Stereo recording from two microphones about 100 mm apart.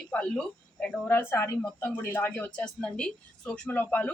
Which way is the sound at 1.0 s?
20° left (ahead or behind).